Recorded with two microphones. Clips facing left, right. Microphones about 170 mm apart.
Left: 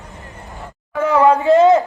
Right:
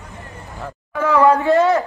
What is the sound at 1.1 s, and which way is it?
Speech, 20° left (ahead or behind).